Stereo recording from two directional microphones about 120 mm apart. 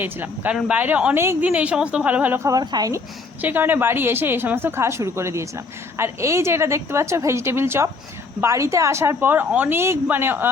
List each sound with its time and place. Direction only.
0.0 s a woman's voice: 15° right (ahead or behind)
3.4 s a woman's voice: 15° right (ahead or behind)